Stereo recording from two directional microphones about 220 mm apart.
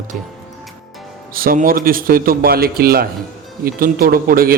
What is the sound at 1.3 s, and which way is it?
A man's voice, 40° right (ahead or behind).